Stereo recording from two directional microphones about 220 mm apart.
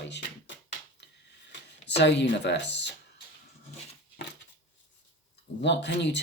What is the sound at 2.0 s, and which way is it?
Speech, 50° left (ahead or behind).